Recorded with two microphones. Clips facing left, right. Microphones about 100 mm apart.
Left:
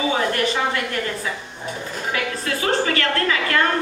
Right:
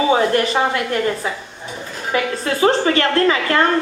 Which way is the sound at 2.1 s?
30° right (ahead or behind).